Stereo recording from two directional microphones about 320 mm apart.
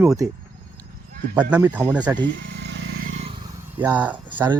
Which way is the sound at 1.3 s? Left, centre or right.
Centre.